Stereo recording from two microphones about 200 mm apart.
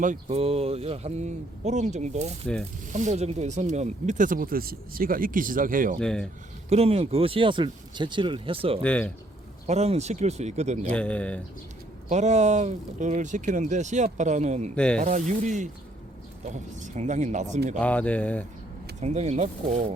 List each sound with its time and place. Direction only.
0.0 s speech: 35° right (ahead or behind)
6.0 s speech: 5° left (ahead or behind)
6.7 s speech: 30° right (ahead or behind)
8.8 s speech: 5° left (ahead or behind)
9.6 s speech: 30° right (ahead or behind)
10.9 s speech: 5° left (ahead or behind)
12.0 s speech: 35° right (ahead or behind)
14.8 s speech: 5° left (ahead or behind)
15.0 s speech: 35° right (ahead or behind)
17.7 s speech: 5° left (ahead or behind)
18.9 s speech: 35° right (ahead or behind)